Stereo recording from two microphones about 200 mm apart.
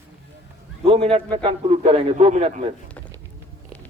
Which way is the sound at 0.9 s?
30° right (ahead or behind).